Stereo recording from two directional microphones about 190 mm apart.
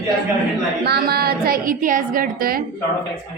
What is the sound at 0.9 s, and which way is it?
A woman's voice, 55° right (ahead or behind).